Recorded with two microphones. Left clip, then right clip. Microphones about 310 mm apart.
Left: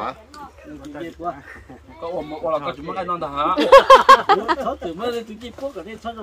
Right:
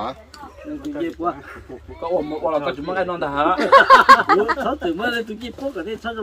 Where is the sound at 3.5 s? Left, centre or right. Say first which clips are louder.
Left 1 dB; left.